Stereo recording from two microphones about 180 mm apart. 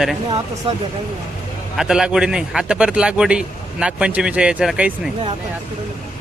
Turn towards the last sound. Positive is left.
turn(degrees=-5)  # may be behind; listen again after turning